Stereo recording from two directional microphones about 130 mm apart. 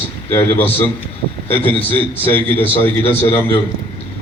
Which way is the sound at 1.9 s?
15° left (ahead or behind).